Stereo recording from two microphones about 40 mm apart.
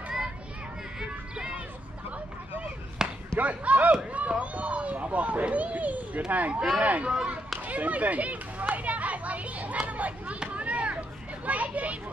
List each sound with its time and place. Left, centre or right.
0.9 s music: right
3.0 s basketball bounce: centre
3.3 s speech: right
3.9 s run: right
4.4 s speech: right
7.6 s children playing: right